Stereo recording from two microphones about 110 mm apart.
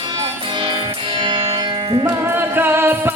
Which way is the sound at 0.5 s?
45° right (ahead or behind).